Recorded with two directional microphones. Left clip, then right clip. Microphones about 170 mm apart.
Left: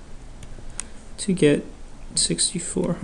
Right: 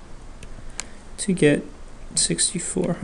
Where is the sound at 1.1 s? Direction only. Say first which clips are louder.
Even; 15° right (ahead or behind).